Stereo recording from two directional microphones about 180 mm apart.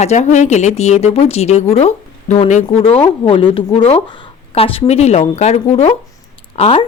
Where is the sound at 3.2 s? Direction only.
30° left (ahead or behind).